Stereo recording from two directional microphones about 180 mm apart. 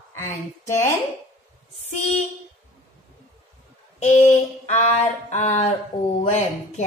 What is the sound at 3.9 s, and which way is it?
Speech, 40° left (ahead or behind).